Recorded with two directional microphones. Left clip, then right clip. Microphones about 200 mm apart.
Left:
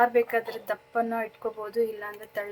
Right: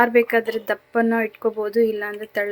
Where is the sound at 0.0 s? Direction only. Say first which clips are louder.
Right 6 dB; 35° right (ahead or behind).